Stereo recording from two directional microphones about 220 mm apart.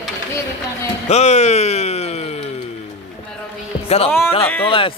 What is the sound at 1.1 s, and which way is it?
Speech, 30° left (ahead or behind).